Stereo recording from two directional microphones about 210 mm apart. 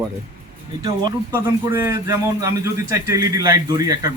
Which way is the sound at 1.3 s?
15° right (ahead or behind).